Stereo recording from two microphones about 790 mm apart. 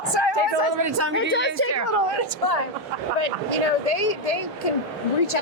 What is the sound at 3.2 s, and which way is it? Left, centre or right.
Speech, left.